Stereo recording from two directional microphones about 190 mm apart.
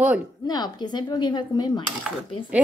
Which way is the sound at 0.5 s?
20° left (ahead or behind).